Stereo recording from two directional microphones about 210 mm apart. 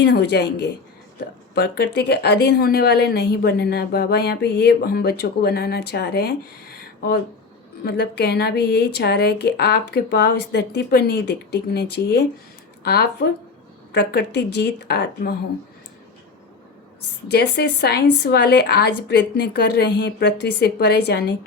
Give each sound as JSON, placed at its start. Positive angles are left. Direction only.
{"t": 0.0, "sound": "a woman's voice", "side_deg": 55}
{"t": 7.9, "sound": "a woman's voice", "side_deg": 50}
{"t": 17.2, "sound": "a woman's voice", "side_deg": 50}